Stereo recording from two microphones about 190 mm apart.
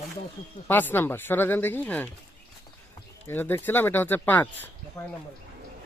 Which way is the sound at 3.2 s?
10° left (ahead or behind).